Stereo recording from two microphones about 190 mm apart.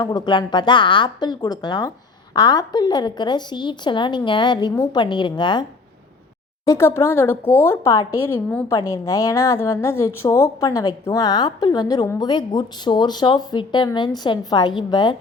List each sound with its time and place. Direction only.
0.0 s a woman's voice: 25° left (ahead or behind)
6.7 s a woman's voice: 15° left (ahead or behind)